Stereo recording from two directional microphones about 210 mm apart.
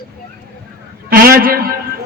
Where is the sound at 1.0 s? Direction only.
45° right (ahead or behind).